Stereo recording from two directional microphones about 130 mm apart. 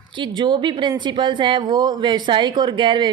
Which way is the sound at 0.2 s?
40° right (ahead or behind).